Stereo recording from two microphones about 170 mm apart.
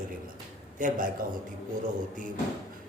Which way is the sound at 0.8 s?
50° right (ahead or behind).